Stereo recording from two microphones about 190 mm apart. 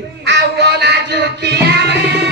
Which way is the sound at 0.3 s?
60° right (ahead or behind).